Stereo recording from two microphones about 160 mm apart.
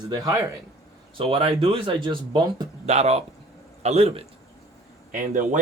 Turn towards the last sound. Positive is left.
turn(degrees=-50)  # may be behind; listen again after turning